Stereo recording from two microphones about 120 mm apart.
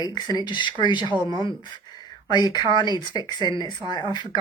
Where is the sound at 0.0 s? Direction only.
35° left (ahead or behind).